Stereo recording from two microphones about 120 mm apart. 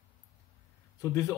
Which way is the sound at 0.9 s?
25° left (ahead or behind).